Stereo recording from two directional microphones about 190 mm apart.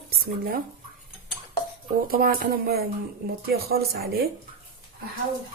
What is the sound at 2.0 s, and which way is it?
Speech, 50° right (ahead or behind).